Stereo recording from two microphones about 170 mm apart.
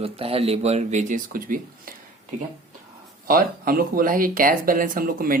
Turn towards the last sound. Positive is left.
turn(degrees=-55)  # may be behind; listen again after turning